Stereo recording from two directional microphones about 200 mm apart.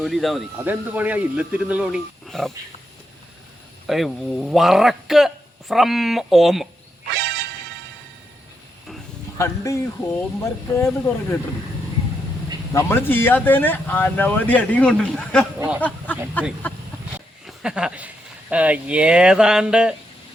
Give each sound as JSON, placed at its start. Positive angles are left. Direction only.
{"t": 0.0, "sound": "speech", "side_deg": 0}
{"t": 3.8, "sound": "speech", "side_deg": 0}
{"t": 7.1, "sound": "music", "side_deg": -55}
{"t": 9.4, "sound": "speech", "side_deg": 15}
{"t": 12.7, "sound": "speech", "side_deg": 10}
{"t": 15.5, "sound": "a sound", "side_deg": -10}
{"t": 16.4, "sound": "speech", "side_deg": 10}
{"t": 17.2, "sound": "a sound", "side_deg": -5}
{"t": 18.5, "sound": "speech", "side_deg": -5}